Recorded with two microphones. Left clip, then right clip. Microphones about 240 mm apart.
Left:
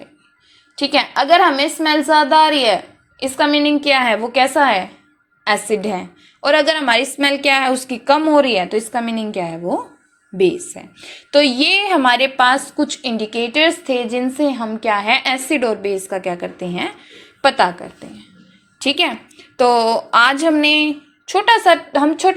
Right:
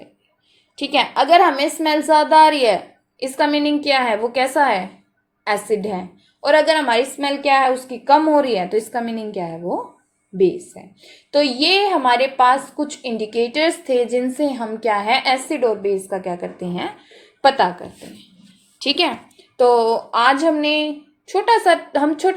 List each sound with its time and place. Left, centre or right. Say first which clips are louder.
0.8 s a woman's voice: left 1 dB; centre